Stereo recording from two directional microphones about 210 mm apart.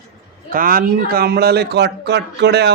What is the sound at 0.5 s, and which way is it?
Speech, 40° right (ahead or behind).